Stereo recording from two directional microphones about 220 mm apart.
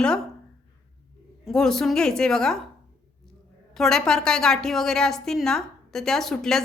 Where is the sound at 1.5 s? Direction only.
Centre (ahead or behind).